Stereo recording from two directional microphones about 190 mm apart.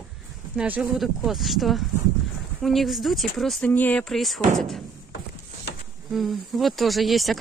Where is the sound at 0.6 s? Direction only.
5° right (ahead or behind).